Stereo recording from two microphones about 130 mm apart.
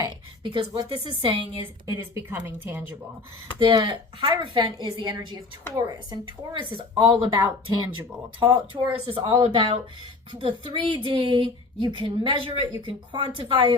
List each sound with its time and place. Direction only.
0.4 s a woman's voice: 45° right (ahead or behind)
1.9 s speech: 25° right (ahead or behind)
3.6 s a woman's voice: 40° right (ahead or behind)